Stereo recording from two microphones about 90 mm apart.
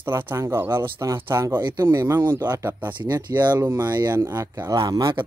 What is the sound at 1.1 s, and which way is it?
Speech, 25° right (ahead or behind).